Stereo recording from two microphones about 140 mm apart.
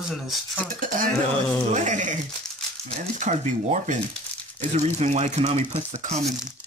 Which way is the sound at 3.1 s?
60° right (ahead or behind).